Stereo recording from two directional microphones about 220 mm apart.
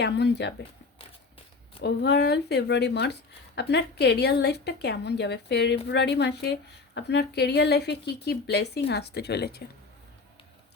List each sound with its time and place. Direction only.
0.0 s speech: 50° left (ahead or behind)
1.8 s speech: 50° left (ahead or behind)